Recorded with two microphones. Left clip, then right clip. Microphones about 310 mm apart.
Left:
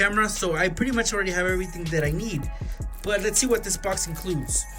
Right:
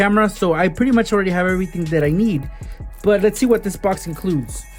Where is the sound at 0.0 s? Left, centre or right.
Centre.